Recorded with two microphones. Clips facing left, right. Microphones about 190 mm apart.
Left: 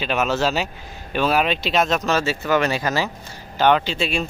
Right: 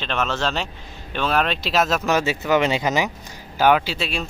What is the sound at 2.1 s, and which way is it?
Speech, 15° right (ahead or behind).